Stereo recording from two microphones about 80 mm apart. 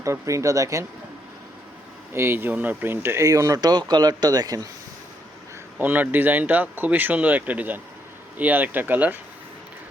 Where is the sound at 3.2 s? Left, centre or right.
Right.